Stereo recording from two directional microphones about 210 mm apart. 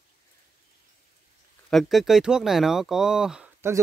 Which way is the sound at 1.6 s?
Centre (ahead or behind).